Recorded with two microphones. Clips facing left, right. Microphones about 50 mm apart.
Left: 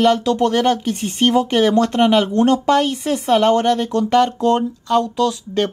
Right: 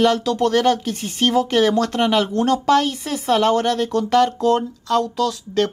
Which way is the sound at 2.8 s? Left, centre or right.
Centre.